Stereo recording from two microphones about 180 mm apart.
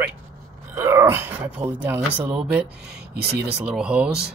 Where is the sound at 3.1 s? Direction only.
60° right (ahead or behind).